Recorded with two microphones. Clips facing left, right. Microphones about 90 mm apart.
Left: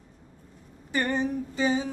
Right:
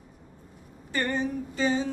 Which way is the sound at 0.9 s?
15° left (ahead or behind).